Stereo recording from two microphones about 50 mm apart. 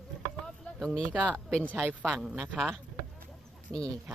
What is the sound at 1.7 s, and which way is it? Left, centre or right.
Speech, right.